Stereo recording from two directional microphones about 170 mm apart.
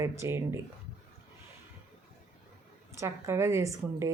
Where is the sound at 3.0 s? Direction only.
15° right (ahead or behind).